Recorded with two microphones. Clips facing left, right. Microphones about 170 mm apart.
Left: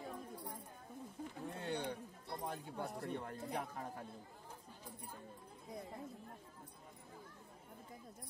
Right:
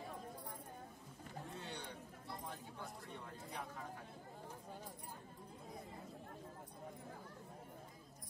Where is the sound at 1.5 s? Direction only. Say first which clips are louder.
Left 10 dB; 60° left (ahead or behind).